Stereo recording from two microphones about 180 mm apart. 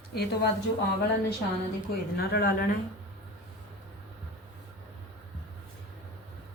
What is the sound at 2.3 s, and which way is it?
Speech, 55° left (ahead or behind).